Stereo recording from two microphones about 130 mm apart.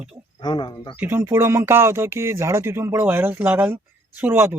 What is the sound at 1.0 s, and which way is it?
Speech, 20° right (ahead or behind).